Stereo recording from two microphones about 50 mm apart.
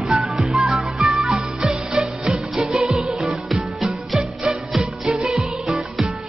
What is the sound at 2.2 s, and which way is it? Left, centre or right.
Music, centre.